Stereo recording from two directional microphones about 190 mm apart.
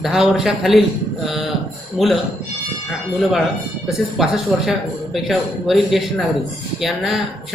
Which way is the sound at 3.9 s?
Centre (ahead or behind).